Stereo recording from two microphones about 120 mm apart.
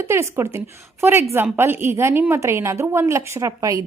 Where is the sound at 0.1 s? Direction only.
25° right (ahead or behind).